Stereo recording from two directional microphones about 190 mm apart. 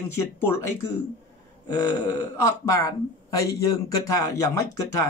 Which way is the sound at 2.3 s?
15° left (ahead or behind).